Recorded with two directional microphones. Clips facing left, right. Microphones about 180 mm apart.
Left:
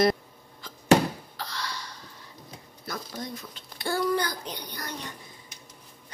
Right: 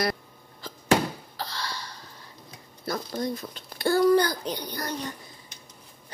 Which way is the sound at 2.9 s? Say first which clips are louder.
Right 7 dB; 35° right (ahead or behind).